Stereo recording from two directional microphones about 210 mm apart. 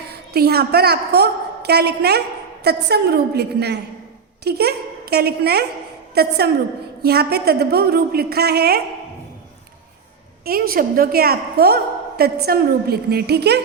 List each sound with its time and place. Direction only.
0.1 s a woman's voice: 50° right (ahead or behind)
10.4 s a woman's voice: 45° right (ahead or behind)